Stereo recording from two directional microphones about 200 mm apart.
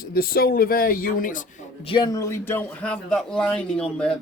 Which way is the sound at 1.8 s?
25° left (ahead or behind).